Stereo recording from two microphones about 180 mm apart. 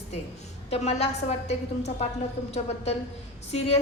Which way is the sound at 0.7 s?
35° left (ahead or behind).